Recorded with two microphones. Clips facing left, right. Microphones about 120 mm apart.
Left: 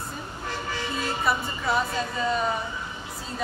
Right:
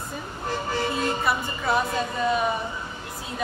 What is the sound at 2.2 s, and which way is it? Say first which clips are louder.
Speech: right 2 dB; 5° right (ahead or behind).